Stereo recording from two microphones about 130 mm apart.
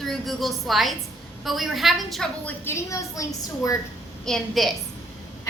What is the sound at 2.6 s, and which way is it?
Speech, 20° left (ahead or behind).